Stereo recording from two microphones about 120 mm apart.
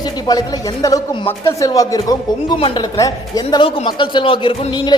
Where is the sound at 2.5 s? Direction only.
50° left (ahead or behind).